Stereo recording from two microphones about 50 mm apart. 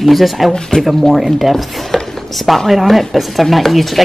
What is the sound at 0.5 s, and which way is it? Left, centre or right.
Speech, centre.